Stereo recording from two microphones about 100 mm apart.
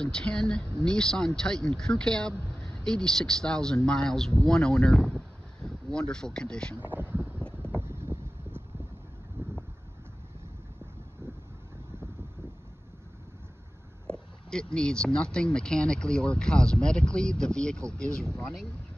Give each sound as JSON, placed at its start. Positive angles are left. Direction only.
{"t": 0.0, "sound": "speech", "side_deg": 10}
{"t": 6.8, "sound": "speech", "side_deg": -20}
{"t": 7.3, "sound": "wind noise", "side_deg": 10}
{"t": 7.7, "sound": "vehicle", "side_deg": -25}
{"t": 9.4, "sound": "a sound", "side_deg": -20}
{"t": 14.0, "sound": "speech", "side_deg": 10}